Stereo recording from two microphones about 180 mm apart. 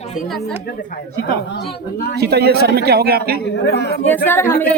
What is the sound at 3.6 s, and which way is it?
Speech, 65° left (ahead or behind).